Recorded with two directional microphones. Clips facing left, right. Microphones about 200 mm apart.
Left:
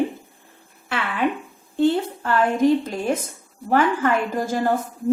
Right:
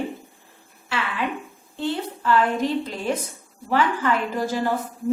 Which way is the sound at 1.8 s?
50° left (ahead or behind).